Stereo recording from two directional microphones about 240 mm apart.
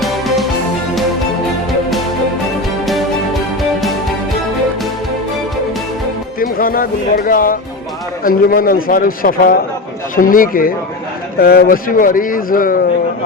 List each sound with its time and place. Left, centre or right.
6.4 s a man's voice: left